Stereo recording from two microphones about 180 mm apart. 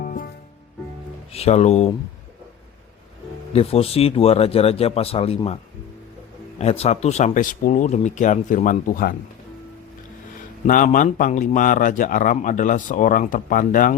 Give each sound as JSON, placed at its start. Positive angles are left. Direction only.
{"t": 0.0, "sound": "music", "side_deg": 45}
{"t": 1.3, "sound": "speech", "side_deg": 35}
{"t": 3.5, "sound": "speech", "side_deg": 35}
{"t": 6.6, "sound": "speech", "side_deg": 35}
{"t": 10.7, "sound": "speech", "side_deg": 45}